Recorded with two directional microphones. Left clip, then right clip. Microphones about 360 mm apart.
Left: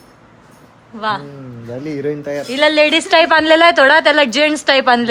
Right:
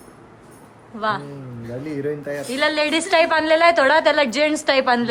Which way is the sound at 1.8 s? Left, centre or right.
Left.